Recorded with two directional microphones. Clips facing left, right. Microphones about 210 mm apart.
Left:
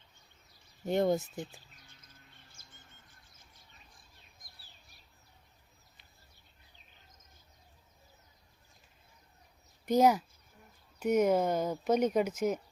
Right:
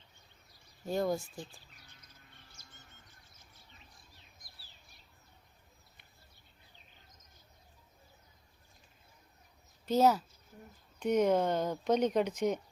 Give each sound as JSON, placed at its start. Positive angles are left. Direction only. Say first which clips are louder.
{"t": 0.9, "sound": "speech", "louder": "left 4 dB", "side_deg": 20}
{"t": 9.8, "sound": "speech", "louder": "left 2 dB", "side_deg": 15}